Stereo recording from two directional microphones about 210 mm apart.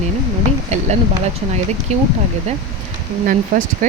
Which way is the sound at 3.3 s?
40° right (ahead or behind).